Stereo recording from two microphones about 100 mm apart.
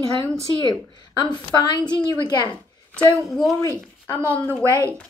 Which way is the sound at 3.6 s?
25° left (ahead or behind).